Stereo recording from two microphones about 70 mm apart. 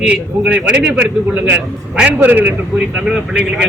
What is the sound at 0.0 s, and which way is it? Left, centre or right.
A man's voice, centre.